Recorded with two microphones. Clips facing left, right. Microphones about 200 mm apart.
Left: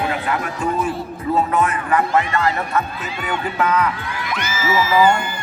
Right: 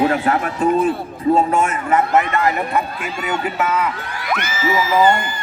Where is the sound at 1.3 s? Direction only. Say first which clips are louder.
Right 1 dB; 25° right (ahead or behind).